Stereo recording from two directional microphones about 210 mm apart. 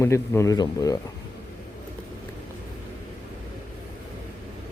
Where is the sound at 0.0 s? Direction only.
15° left (ahead or behind).